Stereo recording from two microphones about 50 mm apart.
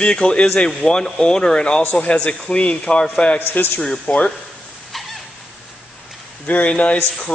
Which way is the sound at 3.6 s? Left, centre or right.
Left.